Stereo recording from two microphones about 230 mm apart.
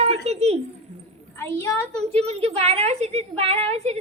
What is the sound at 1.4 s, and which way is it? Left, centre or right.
Speech, centre.